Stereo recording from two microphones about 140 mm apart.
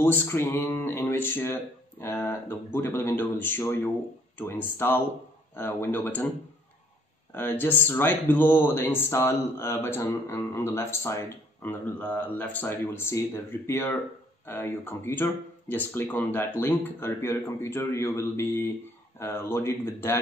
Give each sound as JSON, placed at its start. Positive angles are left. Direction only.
{"t": 0.0, "sound": "speech", "side_deg": 15}
{"t": 7.3, "sound": "speech", "side_deg": 15}